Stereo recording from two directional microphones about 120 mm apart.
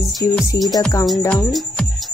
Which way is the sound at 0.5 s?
25° left (ahead or behind).